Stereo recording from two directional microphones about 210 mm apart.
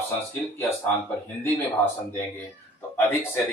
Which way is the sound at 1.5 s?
10° left (ahead or behind).